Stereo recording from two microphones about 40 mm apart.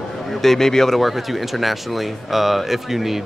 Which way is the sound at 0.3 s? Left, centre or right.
Centre.